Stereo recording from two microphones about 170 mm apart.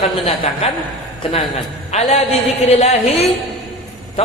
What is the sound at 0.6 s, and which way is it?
Speech, 35° left (ahead or behind).